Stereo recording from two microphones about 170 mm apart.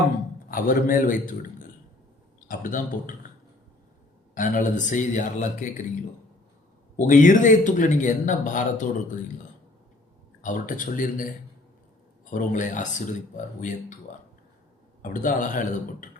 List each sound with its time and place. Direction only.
0.5 s a man's voice: 55° left (ahead or behind)
2.5 s a man's voice: 55° left (ahead or behind)
4.4 s a man's voice: 50° left (ahead or behind)
6.9 s a man's voice: 50° left (ahead or behind)
10.4 s a man's voice: 50° left (ahead or behind)
12.3 s a man's voice: 50° left (ahead or behind)
15.0 s a man's voice: 50° left (ahead or behind)